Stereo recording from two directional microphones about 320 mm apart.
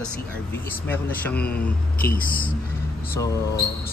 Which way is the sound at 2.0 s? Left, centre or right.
Left.